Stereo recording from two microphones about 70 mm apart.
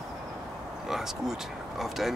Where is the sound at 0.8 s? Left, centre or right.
Centre.